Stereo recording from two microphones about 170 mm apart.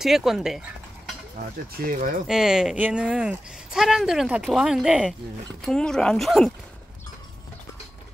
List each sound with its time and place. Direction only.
0.0 s speech: centre (ahead or behind)
1.9 s speech: 55° right (ahead or behind)
2.2 s speech: 5° right (ahead or behind)